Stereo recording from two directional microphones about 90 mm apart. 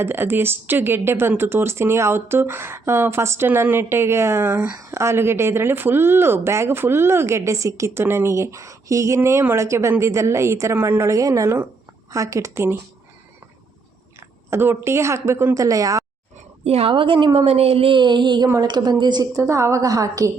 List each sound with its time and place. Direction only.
0.0 s speech: 25° right (ahead or behind)
4.9 s a woman's voice: 30° right (ahead or behind)
14.5 s a woman's voice: 25° right (ahead or behind)
16.8 s a woman's voice: 75° right (ahead or behind); by 19.3 s 55° right (ahead or behind)
19.3 s a woman's voice: 35° right (ahead or behind)